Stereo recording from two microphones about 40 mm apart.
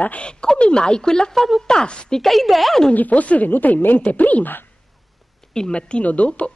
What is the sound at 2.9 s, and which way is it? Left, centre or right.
Speech, left.